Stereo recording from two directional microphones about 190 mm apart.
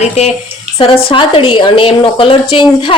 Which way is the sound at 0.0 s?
35° left (ahead or behind).